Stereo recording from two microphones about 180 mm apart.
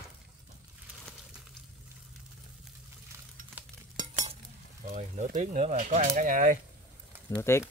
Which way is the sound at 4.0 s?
40° right (ahead or behind).